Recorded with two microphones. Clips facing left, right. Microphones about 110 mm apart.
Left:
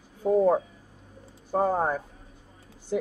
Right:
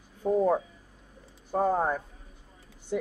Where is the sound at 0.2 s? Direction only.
10° left (ahead or behind).